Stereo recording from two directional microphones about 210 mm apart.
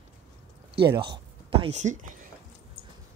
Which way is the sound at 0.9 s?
20° right (ahead or behind).